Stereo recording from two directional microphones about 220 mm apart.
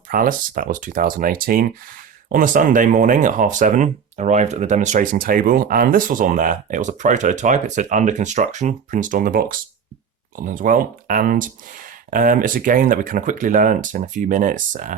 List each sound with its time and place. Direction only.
0.1 s speech: 40° right (ahead or behind)